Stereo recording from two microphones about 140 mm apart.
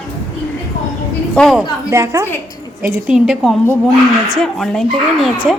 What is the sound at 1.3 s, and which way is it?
Speech, 5° left (ahead or behind).